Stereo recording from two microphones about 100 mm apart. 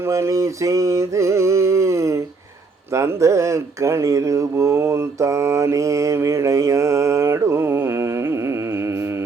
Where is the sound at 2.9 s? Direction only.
30° right (ahead or behind).